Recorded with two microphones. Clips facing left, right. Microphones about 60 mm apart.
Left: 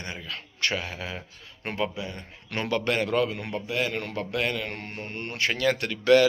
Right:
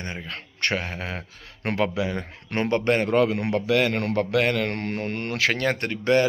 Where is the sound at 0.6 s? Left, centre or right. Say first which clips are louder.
Right 3 dB; right.